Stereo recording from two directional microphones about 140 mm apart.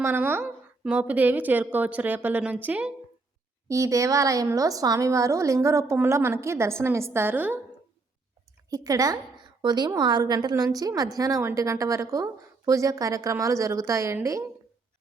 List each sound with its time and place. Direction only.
0.0 s a woman's voice: 15° right (ahead or behind)
3.7 s a woman's voice: 25° right (ahead or behind)
8.7 s a woman's voice: 25° right (ahead or behind)